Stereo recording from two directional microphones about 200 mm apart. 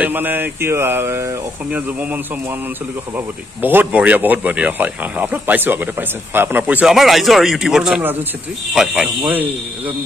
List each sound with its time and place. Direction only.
0.0 s speech: 10° right (ahead or behind)
3.6 s speech: 10° right (ahead or behind)